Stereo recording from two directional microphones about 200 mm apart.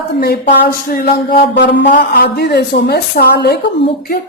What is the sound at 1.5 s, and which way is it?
A man's voice, 60° left (ahead or behind).